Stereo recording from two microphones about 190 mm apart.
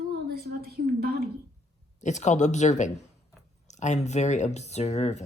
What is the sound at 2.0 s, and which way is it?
Speech, 40° left (ahead or behind).